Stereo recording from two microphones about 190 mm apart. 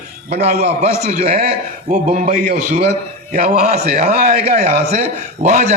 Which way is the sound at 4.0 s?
40° right (ahead or behind).